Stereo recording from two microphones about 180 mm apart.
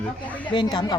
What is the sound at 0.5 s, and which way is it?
Speech, 25° left (ahead or behind).